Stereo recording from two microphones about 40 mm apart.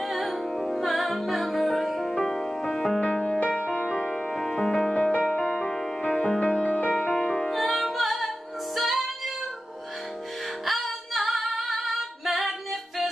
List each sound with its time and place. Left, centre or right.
0.0 s music: centre
4.9 s music: left
5.5 s music: centre
6.6 s music: left
7.2 s music: centre
10.6 s music: centre